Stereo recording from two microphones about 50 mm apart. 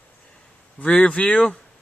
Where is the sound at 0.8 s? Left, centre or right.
Left.